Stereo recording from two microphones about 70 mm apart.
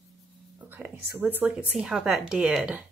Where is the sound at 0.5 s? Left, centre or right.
Right.